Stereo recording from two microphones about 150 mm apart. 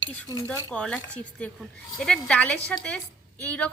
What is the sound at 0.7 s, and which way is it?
A woman's voice, 5° left (ahead or behind).